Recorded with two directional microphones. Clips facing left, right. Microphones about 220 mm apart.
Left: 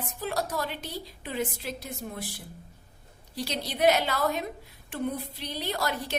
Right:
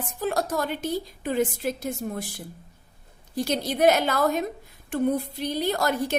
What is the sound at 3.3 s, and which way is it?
A woman's voice, 50° right (ahead or behind).